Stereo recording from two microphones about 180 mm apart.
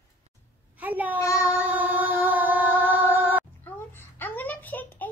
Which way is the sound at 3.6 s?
10° left (ahead or behind).